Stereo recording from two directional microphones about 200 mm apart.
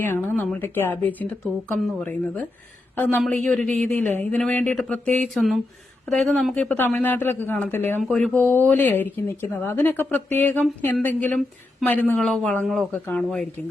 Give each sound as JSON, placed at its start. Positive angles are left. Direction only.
{"t": 0.0, "sound": "a man's voice", "side_deg": 10}
{"t": 4.0, "sound": "speech", "side_deg": -35}
{"t": 4.3, "sound": "a man's voice", "side_deg": 5}